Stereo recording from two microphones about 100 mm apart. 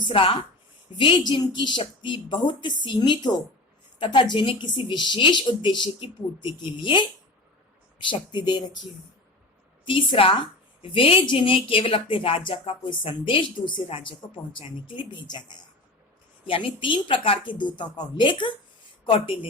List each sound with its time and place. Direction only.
0.0 s a woman's voice: 60° left (ahead or behind)
8.1 s a woman's voice: 50° left (ahead or behind)
9.8 s a woman's voice: 60° left (ahead or behind)
16.5 s a woman's voice: 60° left (ahead or behind)